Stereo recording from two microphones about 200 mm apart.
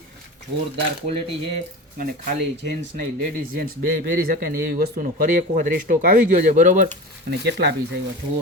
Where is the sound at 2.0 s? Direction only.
45° right (ahead or behind).